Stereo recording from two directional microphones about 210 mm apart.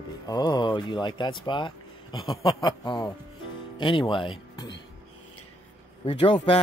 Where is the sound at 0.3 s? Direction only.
20° left (ahead or behind).